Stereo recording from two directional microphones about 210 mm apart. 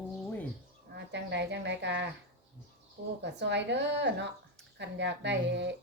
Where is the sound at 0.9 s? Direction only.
55° right (ahead or behind).